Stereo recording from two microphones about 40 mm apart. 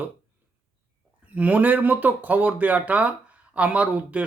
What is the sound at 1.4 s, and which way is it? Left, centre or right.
Speech, right.